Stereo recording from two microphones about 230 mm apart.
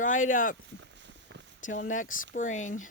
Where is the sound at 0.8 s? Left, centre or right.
Right.